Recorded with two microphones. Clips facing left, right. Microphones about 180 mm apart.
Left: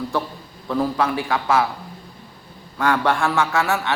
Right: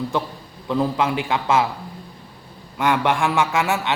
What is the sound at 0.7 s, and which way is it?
Speech, 20° right (ahead or behind).